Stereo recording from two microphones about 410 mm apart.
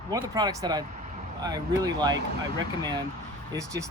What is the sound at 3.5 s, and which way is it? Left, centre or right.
Speech, centre.